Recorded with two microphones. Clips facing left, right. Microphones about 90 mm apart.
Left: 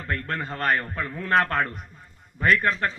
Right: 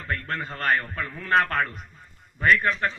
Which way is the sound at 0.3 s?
50° left (ahead or behind).